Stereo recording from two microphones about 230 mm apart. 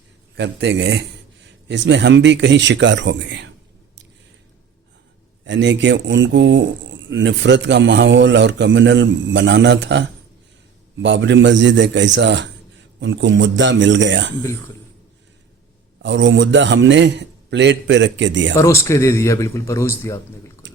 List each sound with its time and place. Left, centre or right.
0.3 s speech: right
5.5 s speech: right
16.0 s speech: right
18.5 s speech: centre
20.6 s a sound: right